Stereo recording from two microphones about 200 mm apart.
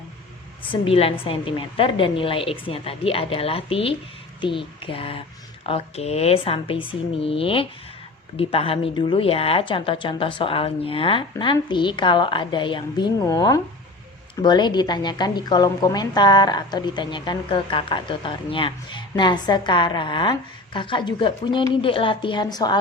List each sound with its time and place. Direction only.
0.7 s a woman's voice: 30° left (ahead or behind)